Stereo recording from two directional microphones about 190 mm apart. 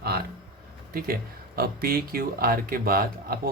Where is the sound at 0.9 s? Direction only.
50° right (ahead or behind).